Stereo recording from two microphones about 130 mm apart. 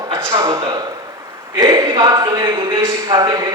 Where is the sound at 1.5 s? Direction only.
30° right (ahead or behind).